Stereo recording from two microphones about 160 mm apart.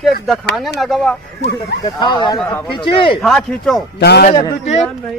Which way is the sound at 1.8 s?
25° left (ahead or behind).